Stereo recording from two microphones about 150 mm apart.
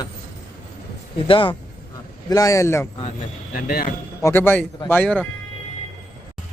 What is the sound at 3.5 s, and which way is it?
Speech, 90° left.